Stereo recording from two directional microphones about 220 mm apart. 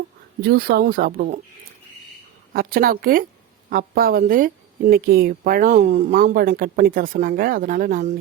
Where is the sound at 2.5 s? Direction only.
40° right (ahead or behind).